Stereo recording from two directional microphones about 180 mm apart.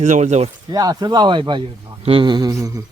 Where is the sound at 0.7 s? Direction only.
20° right (ahead or behind).